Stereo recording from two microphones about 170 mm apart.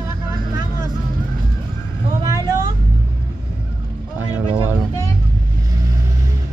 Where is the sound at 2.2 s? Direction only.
20° right (ahead or behind).